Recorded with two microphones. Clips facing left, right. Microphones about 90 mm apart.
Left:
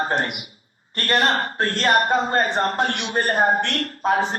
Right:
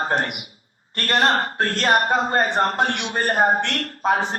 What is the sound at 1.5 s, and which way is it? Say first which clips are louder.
Speech: even; 60° right (ahead or behind).